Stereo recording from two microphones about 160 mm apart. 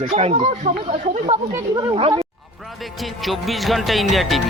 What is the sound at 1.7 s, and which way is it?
Speech, 30° right (ahead or behind).